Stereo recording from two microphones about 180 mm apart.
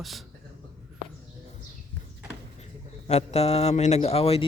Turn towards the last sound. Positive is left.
turn(degrees=35)  # may be behind; listen again after turning